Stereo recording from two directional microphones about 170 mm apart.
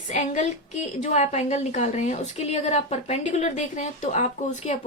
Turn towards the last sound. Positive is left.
turn(degrees=45)  # may be behind; listen again after turning